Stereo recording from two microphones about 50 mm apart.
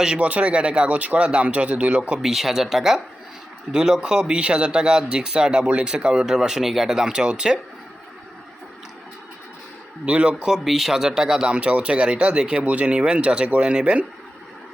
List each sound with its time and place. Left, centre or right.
0.0 s speech: centre
2.2 s speech: centre
10.1 s speech: right
10.4 s speech: centre